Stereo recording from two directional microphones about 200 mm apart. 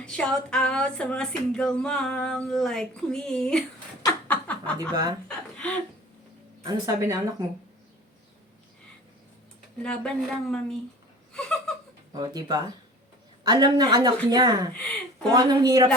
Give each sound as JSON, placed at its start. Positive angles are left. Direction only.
{"t": 0.0, "sound": "speech", "side_deg": 5}
{"t": 4.3, "sound": "a sound", "side_deg": 5}
{"t": 4.8, "sound": "speech", "side_deg": -20}
{"t": 5.5, "sound": "a sound", "side_deg": 5}
{"t": 6.6, "sound": "speech", "side_deg": -20}
{"t": 9.8, "sound": "speech", "side_deg": 5}
{"t": 12.1, "sound": "speech", "side_deg": -20}
{"t": 14.7, "sound": "speech", "side_deg": 5}
{"t": 15.3, "sound": "speech", "side_deg": -20}